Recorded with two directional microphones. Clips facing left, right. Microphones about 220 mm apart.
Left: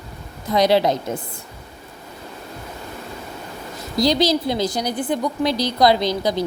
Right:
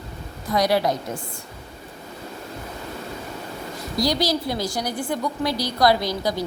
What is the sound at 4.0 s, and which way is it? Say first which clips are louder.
A woman's voice: left 5 dB; 20° left (ahead or behind).